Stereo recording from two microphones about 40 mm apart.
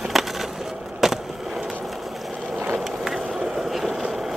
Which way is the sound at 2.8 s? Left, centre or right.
Centre.